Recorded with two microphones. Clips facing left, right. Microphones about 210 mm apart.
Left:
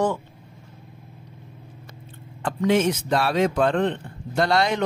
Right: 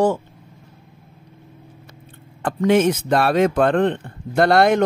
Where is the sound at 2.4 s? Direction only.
55° right (ahead or behind).